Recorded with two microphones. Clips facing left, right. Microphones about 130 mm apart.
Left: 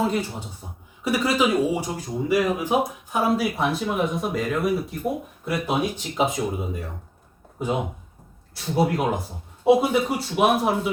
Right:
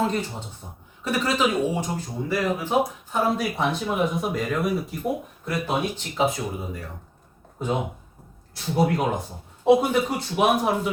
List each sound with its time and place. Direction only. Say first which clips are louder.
0.0 s speech: left 1 dB; 10° left (ahead or behind)
5.6 s speech: left 2 dB; 15° left (ahead or behind)
8.5 s speech: even; centre (ahead or behind)